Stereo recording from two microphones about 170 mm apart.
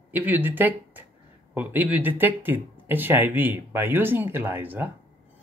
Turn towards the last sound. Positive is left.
turn(degrees=-10)  # may be behind; listen again after turning